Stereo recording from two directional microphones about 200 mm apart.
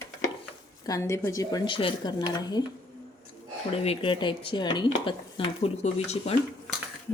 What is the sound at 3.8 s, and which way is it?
Speech, 30° left (ahead or behind).